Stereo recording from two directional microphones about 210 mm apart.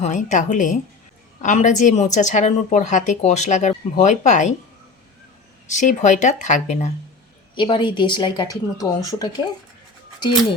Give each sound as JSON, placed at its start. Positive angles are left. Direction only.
{"t": 0.0, "sound": "a woman's voice", "side_deg": 35}
{"t": 5.6, "sound": "a woman's voice", "side_deg": 35}
{"t": 7.5, "sound": "speech", "side_deg": 25}